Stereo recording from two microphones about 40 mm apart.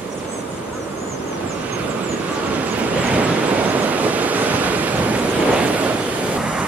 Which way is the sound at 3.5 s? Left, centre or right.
Right.